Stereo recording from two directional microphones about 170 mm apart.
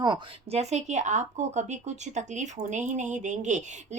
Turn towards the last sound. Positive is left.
turn(degrees=-45)  # may be behind; listen again after turning